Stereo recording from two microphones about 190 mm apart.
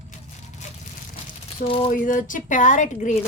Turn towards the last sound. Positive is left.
turn(degrees=40)  # may be behind; listen again after turning